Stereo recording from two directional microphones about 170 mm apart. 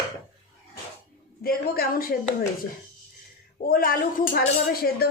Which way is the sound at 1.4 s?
60° left (ahead or behind).